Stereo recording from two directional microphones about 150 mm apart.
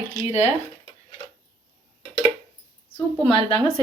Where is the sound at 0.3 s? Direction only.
50° left (ahead or behind).